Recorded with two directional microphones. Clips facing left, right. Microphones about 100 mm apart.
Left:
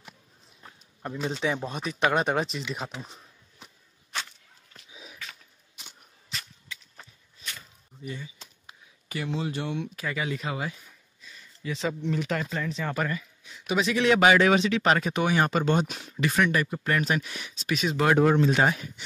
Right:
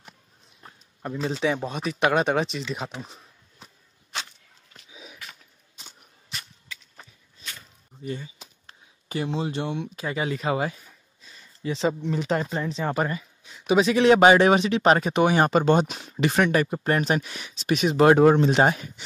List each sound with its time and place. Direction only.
1.1 s speech: 30° right (ahead or behind)
3.1 s a sound: 35° right (ahead or behind)
4.9 s a sound: 5° right (ahead or behind)
8.0 s speech: 40° right (ahead or behind)
9.1 s speech: 30° right (ahead or behind)
10.5 s speech: 45° right (ahead or behind)
11.2 s a sound: 30° right (ahead or behind)
12.1 s speech: 30° right (ahead or behind)
17.6 s speech: 55° right (ahead or behind)
17.9 s speech: 30° right (ahead or behind)